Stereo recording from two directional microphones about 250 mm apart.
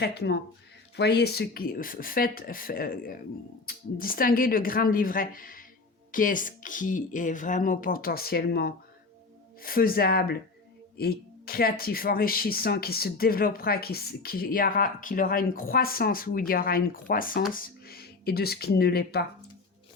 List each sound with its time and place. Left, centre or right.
0.0 s speech: left